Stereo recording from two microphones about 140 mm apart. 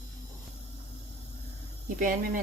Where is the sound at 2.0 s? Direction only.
75° right (ahead or behind).